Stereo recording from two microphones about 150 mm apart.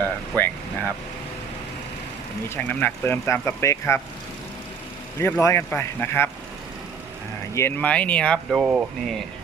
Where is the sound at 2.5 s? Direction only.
15° left (ahead or behind).